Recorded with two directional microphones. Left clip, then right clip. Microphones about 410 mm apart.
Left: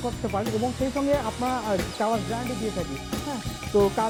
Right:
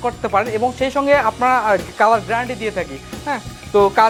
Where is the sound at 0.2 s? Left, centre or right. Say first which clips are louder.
Right 10 dB; centre.